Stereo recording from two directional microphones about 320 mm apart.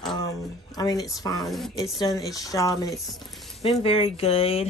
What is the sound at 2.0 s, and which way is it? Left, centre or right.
Speech, centre.